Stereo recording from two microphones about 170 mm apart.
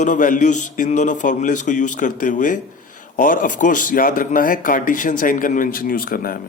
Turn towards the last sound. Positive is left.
turn(degrees=60)  # may be behind; listen again after turning